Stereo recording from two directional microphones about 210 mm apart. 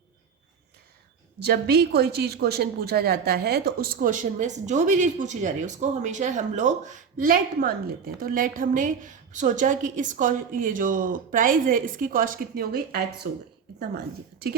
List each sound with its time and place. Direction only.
1.5 s a woman's voice: 50° right (ahead or behind)